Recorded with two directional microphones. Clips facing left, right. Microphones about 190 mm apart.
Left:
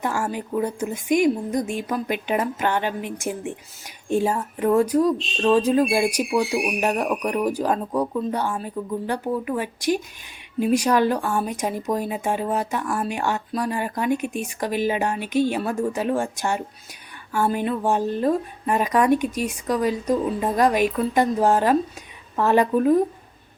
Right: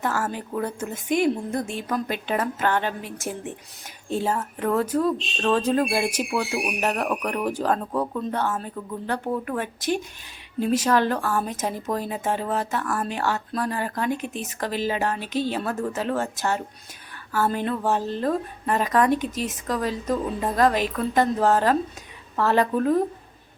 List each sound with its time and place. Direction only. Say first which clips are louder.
0.0 s speech: left 1 dB; 10° left (ahead or behind)